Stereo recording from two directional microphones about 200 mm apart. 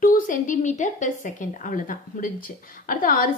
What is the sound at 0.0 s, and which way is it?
A woman's voice, 40° left (ahead or behind).